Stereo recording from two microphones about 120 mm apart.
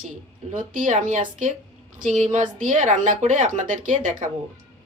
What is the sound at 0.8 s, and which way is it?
A woman's voice, 90° right.